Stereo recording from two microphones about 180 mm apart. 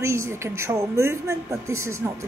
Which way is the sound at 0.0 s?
15° right (ahead or behind).